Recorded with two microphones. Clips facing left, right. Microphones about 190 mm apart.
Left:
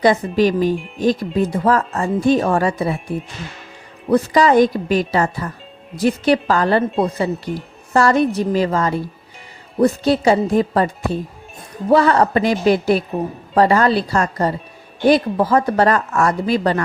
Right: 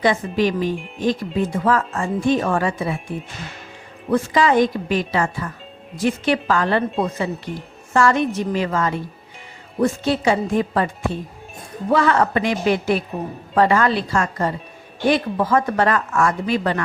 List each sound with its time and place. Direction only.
0.3 s speech: 35° left (ahead or behind)
4.1 s speech: 40° left (ahead or behind)